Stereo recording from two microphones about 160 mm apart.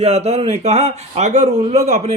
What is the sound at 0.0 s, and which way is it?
A man's voice, 40° right (ahead or behind).